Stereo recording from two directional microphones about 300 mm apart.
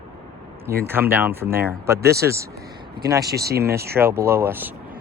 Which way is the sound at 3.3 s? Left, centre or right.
Right.